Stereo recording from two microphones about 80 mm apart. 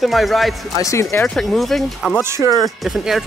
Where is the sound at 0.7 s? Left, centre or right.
Left.